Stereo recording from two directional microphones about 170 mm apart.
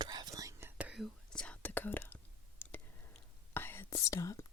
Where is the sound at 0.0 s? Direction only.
25° right (ahead or behind).